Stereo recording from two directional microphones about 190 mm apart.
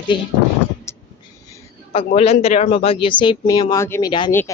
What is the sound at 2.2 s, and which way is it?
A woman's voice, 35° left (ahead or behind).